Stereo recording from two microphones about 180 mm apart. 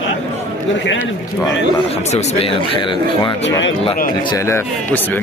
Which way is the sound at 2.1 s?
35° left (ahead or behind).